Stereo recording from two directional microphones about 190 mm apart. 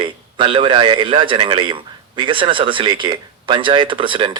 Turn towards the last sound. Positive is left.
turn(degrees=-25)  # may be behind; listen again after turning